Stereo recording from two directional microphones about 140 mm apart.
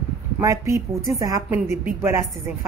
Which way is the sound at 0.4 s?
20° right (ahead or behind).